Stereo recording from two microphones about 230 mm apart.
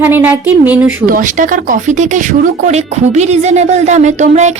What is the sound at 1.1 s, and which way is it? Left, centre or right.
Speech, right.